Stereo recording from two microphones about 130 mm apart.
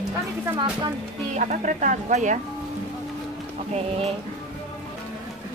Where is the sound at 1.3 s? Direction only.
80° right.